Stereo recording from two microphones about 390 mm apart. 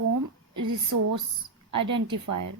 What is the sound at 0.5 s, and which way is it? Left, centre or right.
A woman's voice, right.